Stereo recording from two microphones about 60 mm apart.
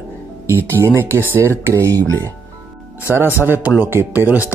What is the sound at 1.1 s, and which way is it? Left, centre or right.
Speech, right.